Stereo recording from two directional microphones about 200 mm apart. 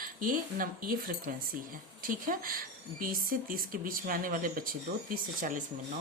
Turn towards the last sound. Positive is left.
turn(degrees=-40)  # may be behind; listen again after turning